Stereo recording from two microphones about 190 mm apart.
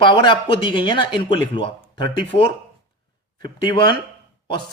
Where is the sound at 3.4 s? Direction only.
25° left (ahead or behind).